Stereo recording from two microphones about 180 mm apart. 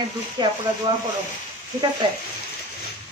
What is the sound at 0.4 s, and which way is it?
Speech, 25° right (ahead or behind).